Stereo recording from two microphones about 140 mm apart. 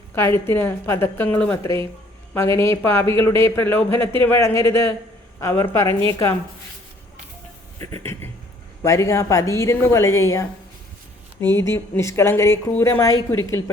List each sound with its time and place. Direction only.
0.1 s a woman's voice: 15° left (ahead or behind)
7.8 s a woman's voice: 25° left (ahead or behind)
11.5 s a woman's voice: 20° left (ahead or behind)